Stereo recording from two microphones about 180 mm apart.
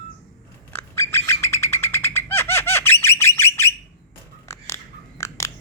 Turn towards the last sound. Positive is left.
turn(degrees=15)  # may be behind; listen again after turning